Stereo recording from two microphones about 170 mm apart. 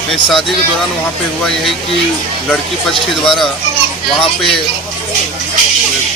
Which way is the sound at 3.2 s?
Centre (ahead or behind).